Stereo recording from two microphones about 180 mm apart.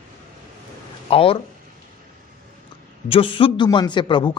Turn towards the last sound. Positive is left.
turn(degrees=25)  # may be behind; listen again after turning